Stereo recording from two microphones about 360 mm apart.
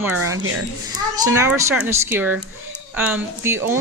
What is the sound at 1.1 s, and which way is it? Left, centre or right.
Speech, centre.